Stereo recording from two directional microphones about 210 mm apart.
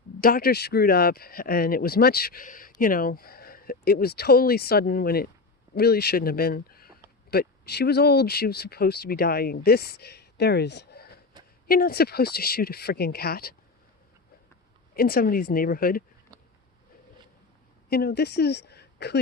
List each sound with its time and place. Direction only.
0.2 s speech: 45° left (ahead or behind)
14.9 s speech: 45° left (ahead or behind)
17.8 s speech: 45° left (ahead or behind)